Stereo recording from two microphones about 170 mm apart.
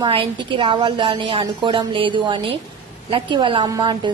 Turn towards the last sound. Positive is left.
turn(degrees=-25)  # may be behind; listen again after turning